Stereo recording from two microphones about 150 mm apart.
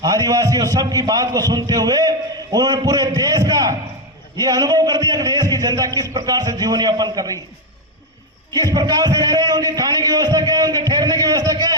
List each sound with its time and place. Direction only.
0.0 s a man's voice: 25° right (ahead or behind)
8.5 s a man's voice: 25° right (ahead or behind)